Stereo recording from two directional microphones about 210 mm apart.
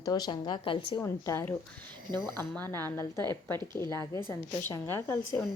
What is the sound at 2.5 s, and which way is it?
A woman's voice, 10° left (ahead or behind).